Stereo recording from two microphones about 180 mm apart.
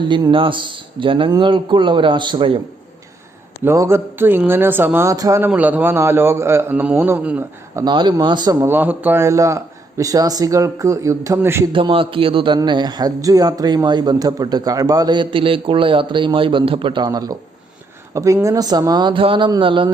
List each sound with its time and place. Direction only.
0.0 s a man's voice: 25° right (ahead or behind)
3.6 s a man's voice: 15° right (ahead or behind)
7.9 s a man's voice: 25° right (ahead or behind)
8.6 s a man's voice: 10° right (ahead or behind)
11.7 s a man's voice: 30° right (ahead or behind)